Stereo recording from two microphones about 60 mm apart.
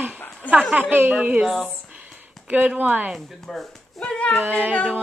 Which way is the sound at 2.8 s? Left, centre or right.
Right.